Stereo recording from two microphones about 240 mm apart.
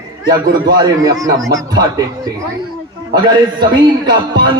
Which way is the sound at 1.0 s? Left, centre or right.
Centre.